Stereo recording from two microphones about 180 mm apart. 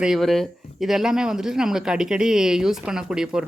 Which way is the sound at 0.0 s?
Centre (ahead or behind).